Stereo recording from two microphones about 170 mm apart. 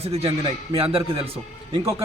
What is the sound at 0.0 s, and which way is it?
A man's voice, 35° right (ahead or behind).